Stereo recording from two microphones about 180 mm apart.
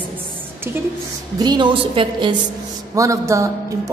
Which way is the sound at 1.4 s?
25° right (ahead or behind).